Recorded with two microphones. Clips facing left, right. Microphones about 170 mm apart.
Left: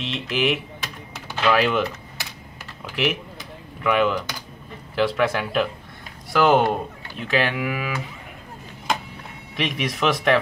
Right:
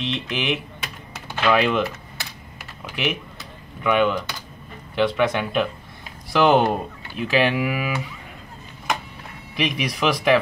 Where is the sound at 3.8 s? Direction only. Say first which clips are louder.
Right 1 dB; centre (ahead or behind).